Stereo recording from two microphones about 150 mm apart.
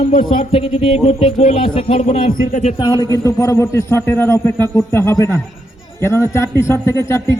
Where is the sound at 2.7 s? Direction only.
30° left (ahead or behind).